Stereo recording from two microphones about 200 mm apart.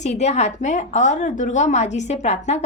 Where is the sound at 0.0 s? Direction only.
35° left (ahead or behind).